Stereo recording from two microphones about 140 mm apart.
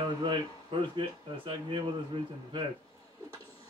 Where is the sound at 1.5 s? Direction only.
35° right (ahead or behind).